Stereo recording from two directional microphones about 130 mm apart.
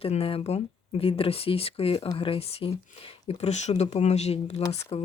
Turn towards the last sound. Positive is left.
turn(degrees=55)  # may be behind; listen again after turning